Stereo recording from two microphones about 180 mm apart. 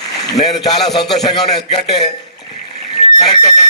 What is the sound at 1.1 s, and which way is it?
Speech, centre (ahead or behind).